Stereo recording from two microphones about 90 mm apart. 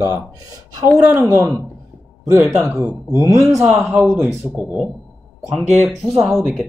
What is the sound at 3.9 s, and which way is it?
Speech, 25° right (ahead or behind).